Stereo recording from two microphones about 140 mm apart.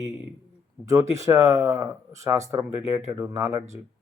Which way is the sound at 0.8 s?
20° right (ahead or behind).